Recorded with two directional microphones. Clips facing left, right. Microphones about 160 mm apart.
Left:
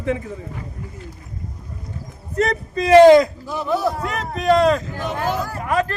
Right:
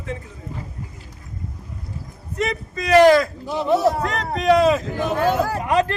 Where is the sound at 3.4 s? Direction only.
20° right (ahead or behind).